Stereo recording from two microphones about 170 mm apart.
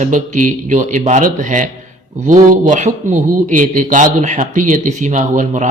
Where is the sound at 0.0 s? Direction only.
50° right (ahead or behind).